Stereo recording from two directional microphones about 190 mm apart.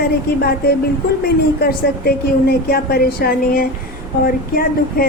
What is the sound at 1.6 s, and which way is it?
A woman's voice, 55° left (ahead or behind).